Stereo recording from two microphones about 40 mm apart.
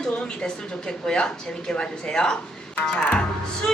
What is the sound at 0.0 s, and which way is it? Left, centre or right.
A woman's voice, centre.